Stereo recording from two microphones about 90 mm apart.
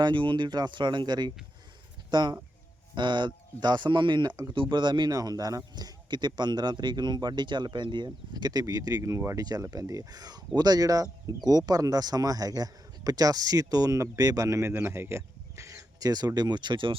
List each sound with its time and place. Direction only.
0.0 s speech: 65° right (ahead or behind)
4.5 s speech: 65° right (ahead or behind)